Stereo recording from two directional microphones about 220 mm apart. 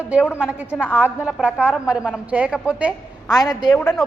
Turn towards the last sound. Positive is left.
turn(degrees=10)  # may be behind; listen again after turning